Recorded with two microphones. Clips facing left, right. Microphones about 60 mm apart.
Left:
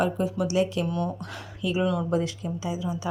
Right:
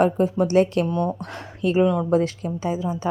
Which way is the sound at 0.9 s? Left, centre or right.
Right.